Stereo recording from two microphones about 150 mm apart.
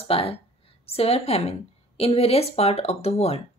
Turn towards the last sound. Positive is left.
turn(degrees=45)  # may be behind; listen again after turning